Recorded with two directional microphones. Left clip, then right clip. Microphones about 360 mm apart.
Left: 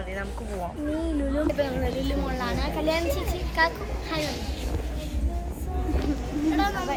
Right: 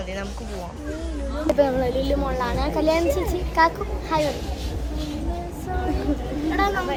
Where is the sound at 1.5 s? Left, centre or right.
Centre.